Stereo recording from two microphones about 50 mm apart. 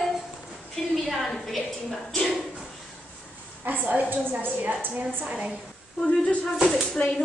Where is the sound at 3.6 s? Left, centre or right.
Right.